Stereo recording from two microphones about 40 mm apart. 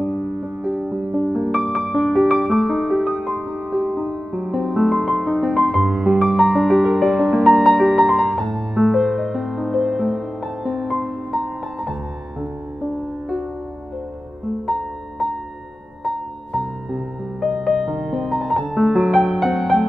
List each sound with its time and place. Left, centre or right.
0.0 s music: centre
1.8 s music: centre
5.8 s music: right
6.3 s music: centre
7.4 s music: centre
8.7 s music: centre
14.7 s music: centre
17.4 s music: centre
17.8 s music: centre
18.3 s music: centre
18.8 s music: centre